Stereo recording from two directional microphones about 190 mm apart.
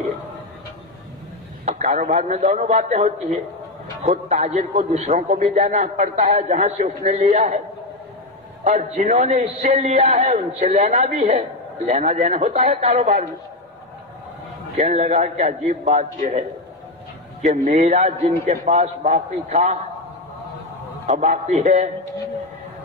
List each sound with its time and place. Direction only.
1.7 s a man's voice: 40° right (ahead or behind)
8.6 s a man's voice: 35° right (ahead or behind)
14.8 s a man's voice: 35° right (ahead or behind)
17.6 s a man's voice: 35° right (ahead or behind)
21.1 s a man's voice: 35° right (ahead or behind)